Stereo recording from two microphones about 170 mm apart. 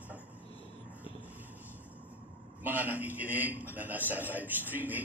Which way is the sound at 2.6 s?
10° right (ahead or behind).